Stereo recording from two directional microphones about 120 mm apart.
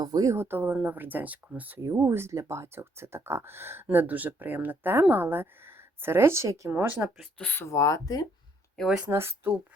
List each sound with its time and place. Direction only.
0.0 s speech: 30° right (ahead or behind)
7.2 s speech: 10° left (ahead or behind); by 8.3 s 30° left (ahead or behind)
8.7 s speech: 5° left (ahead or behind)
9.0 s speech: 20° right (ahead or behind)